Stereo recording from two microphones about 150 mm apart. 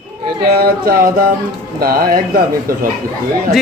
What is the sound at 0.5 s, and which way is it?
Speech, 85° right.